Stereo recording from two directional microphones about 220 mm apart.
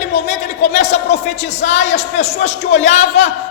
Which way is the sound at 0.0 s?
30° left (ahead or behind).